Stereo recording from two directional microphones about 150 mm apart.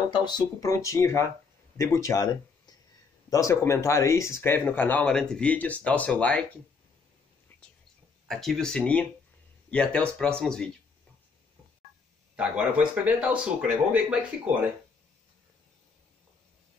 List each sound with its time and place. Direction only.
0.1 s speech: 30° left (ahead or behind); by 6.4 s 10° left (ahead or behind)
8.3 s speech: centre (ahead or behind)
12.4 s speech: 10° right (ahead or behind)